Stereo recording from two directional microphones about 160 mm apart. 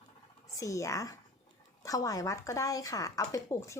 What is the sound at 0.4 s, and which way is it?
Speech, 20° left (ahead or behind).